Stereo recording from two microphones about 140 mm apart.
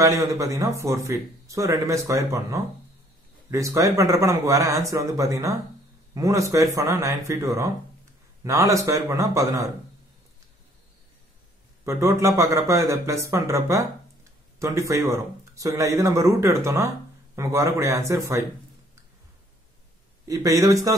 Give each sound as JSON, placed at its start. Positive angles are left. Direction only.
{"t": 0.0, "sound": "a man's voice", "side_deg": -20}
{"t": 11.8, "sound": "a man's voice", "side_deg": -20}
{"t": 20.2, "sound": "a man's voice", "side_deg": -25}